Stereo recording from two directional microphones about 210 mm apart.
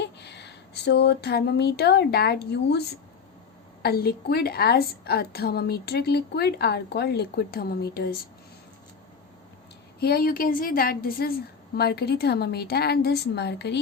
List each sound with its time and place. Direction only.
0.0 s speech: 55° left (ahead or behind)
3.8 s a woman's voice: 50° left (ahead or behind)
10.0 s a woman's voice: 45° left (ahead or behind)